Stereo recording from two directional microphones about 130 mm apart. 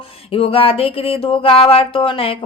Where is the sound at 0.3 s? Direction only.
45° left (ahead or behind).